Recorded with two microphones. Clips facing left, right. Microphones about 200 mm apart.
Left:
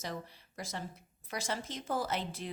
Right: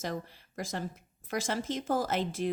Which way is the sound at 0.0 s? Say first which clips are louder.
Right 5 dB; 45° right (ahead or behind).